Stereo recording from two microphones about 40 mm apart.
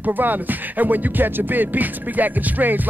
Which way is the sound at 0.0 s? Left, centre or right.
Right.